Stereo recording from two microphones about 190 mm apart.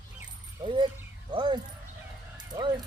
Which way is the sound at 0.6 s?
25° right (ahead or behind).